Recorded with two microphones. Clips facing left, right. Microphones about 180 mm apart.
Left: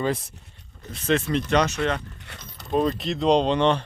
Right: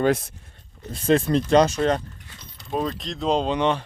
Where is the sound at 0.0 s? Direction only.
80° right.